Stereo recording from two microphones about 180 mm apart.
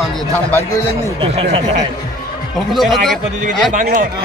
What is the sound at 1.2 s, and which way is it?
Speech, 35° right (ahead or behind).